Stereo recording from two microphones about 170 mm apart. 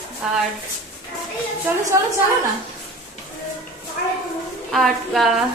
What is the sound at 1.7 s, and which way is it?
Speech, 10° right (ahead or behind).